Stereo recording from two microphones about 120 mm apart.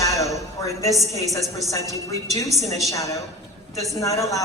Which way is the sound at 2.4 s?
Centre (ahead or behind).